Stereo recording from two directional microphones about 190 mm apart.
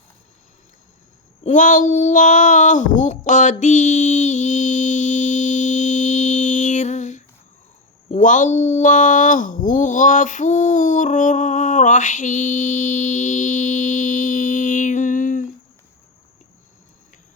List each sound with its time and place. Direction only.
1.5 s child singing: 40° left (ahead or behind)
8.1 s speech: 40° left (ahead or behind)